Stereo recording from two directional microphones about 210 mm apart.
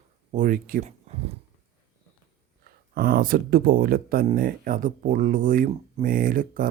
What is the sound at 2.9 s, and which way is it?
Speech, 45° right (ahead or behind).